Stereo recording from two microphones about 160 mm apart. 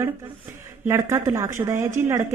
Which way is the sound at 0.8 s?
15° right (ahead or behind).